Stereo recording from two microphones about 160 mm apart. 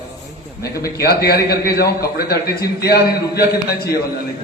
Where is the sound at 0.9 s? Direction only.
75° left (ahead or behind).